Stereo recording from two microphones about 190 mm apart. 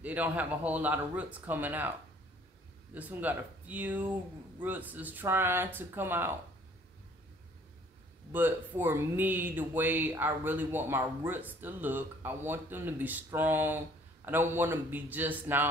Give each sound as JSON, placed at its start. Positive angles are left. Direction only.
{"t": 0.0, "sound": "speech", "side_deg": -10}
{"t": 2.9, "sound": "speech", "side_deg": -10}
{"t": 8.3, "sound": "speech", "side_deg": -10}